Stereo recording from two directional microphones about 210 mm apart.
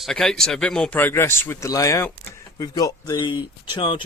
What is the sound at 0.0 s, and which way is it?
Speech, centre (ahead or behind).